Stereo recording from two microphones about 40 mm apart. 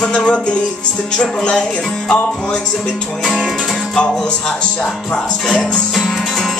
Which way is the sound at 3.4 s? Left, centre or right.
Centre.